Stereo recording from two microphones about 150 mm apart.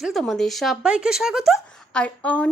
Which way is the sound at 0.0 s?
Centre (ahead or behind).